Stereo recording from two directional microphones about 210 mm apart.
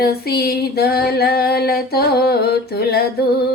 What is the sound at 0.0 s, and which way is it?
Female singing, 50° left (ahead or behind).